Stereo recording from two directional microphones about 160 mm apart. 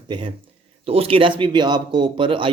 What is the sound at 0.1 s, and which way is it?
Speech, 30° right (ahead or behind).